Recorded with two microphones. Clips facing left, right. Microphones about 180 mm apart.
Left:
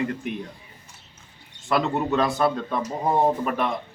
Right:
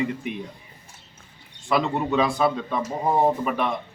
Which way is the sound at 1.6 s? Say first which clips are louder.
Even; centre (ahead or behind).